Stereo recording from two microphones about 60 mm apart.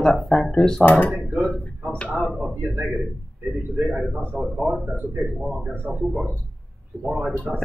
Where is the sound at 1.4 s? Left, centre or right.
Centre.